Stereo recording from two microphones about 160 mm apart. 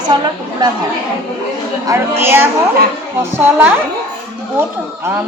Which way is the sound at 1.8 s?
15° right (ahead or behind).